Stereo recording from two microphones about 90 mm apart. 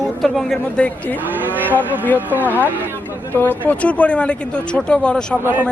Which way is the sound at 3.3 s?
20° left (ahead or behind).